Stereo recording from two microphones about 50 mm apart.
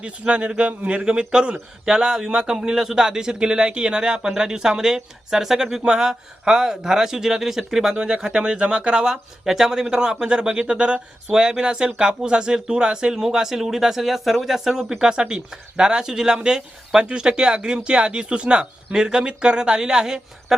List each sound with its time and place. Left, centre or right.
0.0 s speech: right